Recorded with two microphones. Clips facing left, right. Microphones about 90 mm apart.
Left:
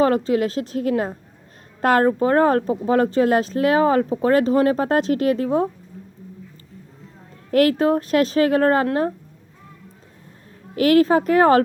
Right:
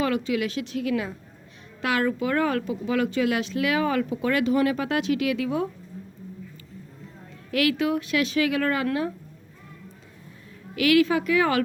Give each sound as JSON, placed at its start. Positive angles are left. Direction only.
{"t": 0.0, "sound": "speech", "side_deg": 40}
{"t": 7.5, "sound": "speech", "side_deg": 40}
{"t": 10.8, "sound": "speech", "side_deg": 40}